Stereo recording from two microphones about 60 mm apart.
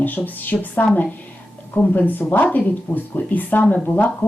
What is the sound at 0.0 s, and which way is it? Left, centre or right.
Speech, left.